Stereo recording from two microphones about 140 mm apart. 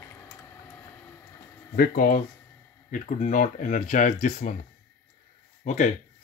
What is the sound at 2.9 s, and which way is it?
Speech, 65° left (ahead or behind).